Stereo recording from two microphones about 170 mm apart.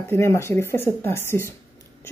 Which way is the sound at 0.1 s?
15° left (ahead or behind).